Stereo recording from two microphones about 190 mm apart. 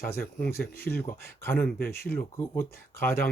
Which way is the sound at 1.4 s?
10° left (ahead or behind).